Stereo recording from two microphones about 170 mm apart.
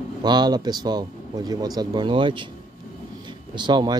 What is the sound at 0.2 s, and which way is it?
Speech, 25° right (ahead or behind).